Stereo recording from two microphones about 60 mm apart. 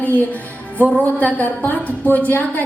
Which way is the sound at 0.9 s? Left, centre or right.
Left.